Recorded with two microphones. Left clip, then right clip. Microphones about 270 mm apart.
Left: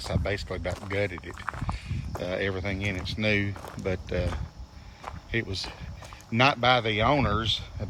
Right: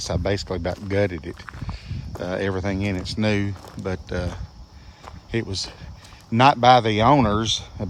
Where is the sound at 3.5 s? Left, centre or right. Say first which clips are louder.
Right 2 dB; centre.